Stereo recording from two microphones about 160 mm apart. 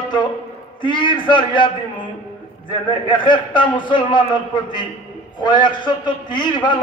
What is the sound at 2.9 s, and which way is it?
A man's voice, 30° left (ahead or behind).